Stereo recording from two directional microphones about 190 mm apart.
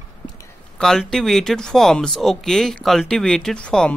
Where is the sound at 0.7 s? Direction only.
Centre (ahead or behind).